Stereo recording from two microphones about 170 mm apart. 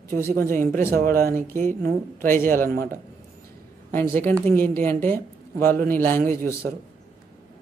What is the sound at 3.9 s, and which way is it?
Speech, 10° left (ahead or behind).